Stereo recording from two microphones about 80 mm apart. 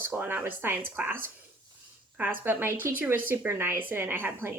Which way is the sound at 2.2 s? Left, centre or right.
Right.